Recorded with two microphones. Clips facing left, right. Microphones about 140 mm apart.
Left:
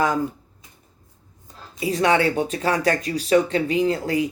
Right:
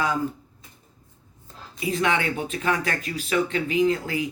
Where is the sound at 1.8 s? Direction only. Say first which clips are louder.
Left 5 dB; 35° left (ahead or behind).